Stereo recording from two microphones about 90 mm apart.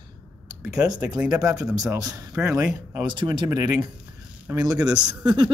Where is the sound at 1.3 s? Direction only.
40° right (ahead or behind).